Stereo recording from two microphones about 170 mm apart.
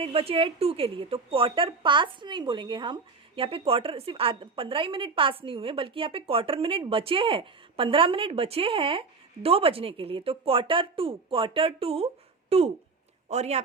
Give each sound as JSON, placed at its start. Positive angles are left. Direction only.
{"t": 0.0, "sound": "a woman's voice", "side_deg": -35}